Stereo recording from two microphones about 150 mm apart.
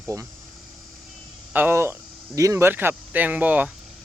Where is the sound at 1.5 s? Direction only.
15° right (ahead or behind).